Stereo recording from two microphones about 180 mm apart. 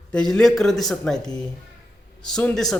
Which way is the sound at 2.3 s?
5° left (ahead or behind).